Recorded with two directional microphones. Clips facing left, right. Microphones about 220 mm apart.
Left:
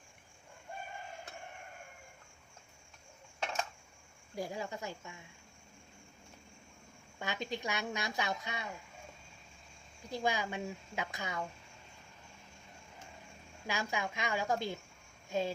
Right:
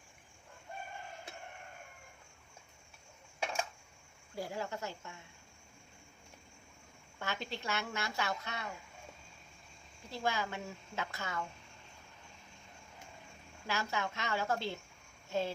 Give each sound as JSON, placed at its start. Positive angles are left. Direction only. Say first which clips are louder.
{"t": 3.4, "sound": "a sound", "louder": "right 1 dB", "side_deg": -10}
{"t": 4.4, "sound": "a woman's voice", "louder": "even", "side_deg": 15}
{"t": 7.2, "sound": "a woman's voice", "louder": "left 2 dB", "side_deg": 15}
{"t": 10.1, "sound": "a woman's voice", "louder": "left 2 dB", "side_deg": 15}
{"t": 13.7, "sound": "a woman's voice", "louder": "even", "side_deg": 15}
{"t": 15.3, "sound": "child singing", "louder": "left 1 dB", "side_deg": 15}